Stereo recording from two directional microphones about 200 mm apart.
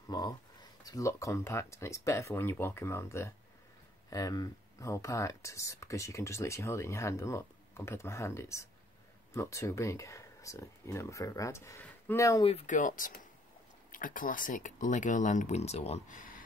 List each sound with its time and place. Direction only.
0.1 s speech: 20° left (ahead or behind)
12.4 s speech: 35° left (ahead or behind)